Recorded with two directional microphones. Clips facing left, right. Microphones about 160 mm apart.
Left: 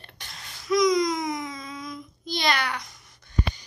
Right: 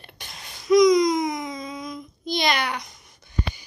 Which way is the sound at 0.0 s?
15° right (ahead or behind).